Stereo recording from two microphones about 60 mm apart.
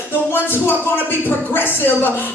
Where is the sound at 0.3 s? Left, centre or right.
Left.